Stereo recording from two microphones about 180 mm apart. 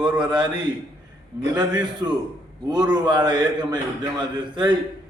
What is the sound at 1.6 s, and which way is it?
A man's voice, 20° right (ahead or behind).